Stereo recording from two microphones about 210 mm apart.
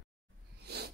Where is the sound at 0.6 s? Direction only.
50° right (ahead or behind).